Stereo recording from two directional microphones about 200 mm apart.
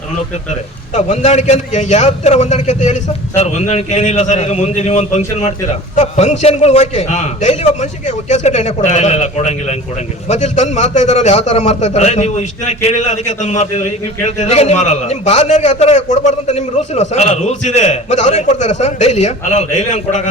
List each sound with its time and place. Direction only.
0.9 s a man's voice: 35° left (ahead or behind)